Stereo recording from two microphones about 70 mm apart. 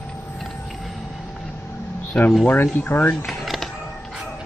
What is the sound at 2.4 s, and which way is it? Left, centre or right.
Speech, left.